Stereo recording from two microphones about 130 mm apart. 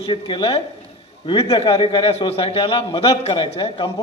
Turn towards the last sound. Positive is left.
turn(degrees=35)  # may be behind; listen again after turning